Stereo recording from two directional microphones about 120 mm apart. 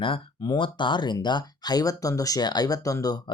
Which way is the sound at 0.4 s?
40° left (ahead or behind).